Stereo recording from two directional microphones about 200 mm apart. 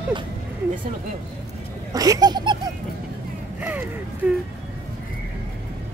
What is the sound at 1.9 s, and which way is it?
Duck, 20° right (ahead or behind).